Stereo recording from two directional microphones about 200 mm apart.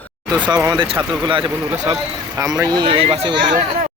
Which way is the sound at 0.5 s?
20° right (ahead or behind).